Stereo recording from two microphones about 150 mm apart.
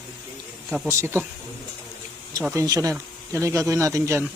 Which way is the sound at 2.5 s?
25° right (ahead or behind).